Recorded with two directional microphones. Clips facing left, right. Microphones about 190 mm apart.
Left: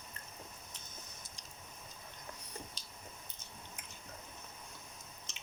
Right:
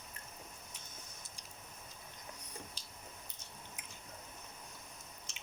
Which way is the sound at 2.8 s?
10° right (ahead or behind).